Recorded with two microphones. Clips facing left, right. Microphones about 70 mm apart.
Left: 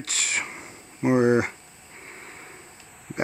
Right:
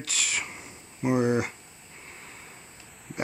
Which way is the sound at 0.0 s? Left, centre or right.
Left.